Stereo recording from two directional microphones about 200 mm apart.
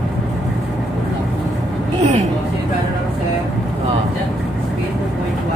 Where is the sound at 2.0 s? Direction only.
35° right (ahead or behind).